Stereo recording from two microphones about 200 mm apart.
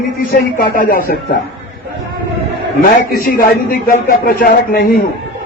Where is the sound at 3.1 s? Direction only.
45° left (ahead or behind).